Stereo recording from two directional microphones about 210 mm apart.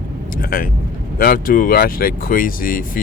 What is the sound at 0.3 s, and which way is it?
Speech, 45° left (ahead or behind).